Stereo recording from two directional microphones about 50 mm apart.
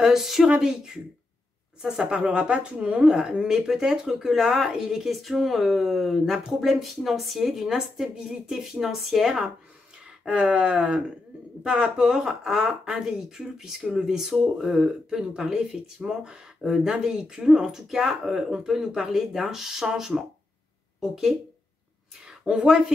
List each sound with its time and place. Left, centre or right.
0.0 s speech: centre
10.2 s a woman's voice: right